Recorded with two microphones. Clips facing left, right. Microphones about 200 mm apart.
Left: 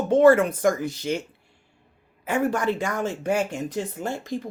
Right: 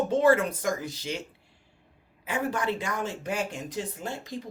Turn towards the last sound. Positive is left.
turn(degrees=50)  # may be behind; listen again after turning